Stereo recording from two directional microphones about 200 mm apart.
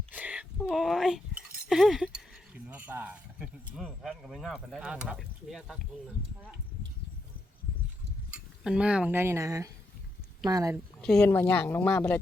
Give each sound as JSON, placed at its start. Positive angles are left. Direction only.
{"t": 0.1, "sound": "chink", "side_deg": -5}
{"t": 2.6, "sound": "speech", "side_deg": -5}
{"t": 8.3, "sound": "cutlery", "side_deg": -5}
{"t": 10.4, "sound": "speech", "side_deg": -15}
{"t": 11.0, "sound": "speech", "side_deg": 5}